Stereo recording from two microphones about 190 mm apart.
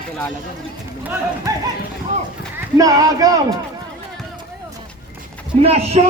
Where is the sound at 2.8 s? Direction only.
20° right (ahead or behind).